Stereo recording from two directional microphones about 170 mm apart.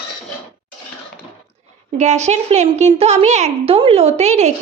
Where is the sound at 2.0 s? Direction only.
40° right (ahead or behind).